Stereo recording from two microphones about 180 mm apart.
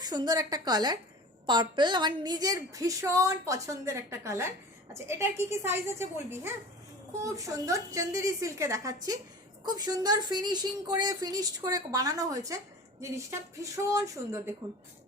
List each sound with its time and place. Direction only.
0.0 s a woman's voice: 20° right (ahead or behind)